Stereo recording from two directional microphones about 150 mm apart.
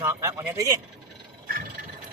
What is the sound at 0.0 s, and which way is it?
Speech, 20° right (ahead or behind).